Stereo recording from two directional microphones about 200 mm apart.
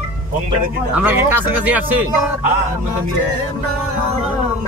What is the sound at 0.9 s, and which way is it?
Speech, 10° right (ahead or behind).